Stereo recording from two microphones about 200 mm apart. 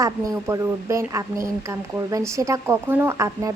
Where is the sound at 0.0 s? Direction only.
15° right (ahead or behind).